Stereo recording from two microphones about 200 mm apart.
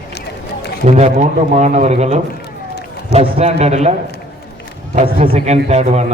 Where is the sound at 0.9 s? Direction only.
30° right (ahead or behind).